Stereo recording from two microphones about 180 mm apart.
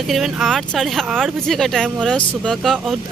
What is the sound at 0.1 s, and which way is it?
Speech, centre (ahead or behind).